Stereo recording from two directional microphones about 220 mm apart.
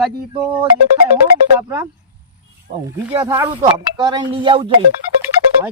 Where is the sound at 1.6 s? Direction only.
15° right (ahead or behind).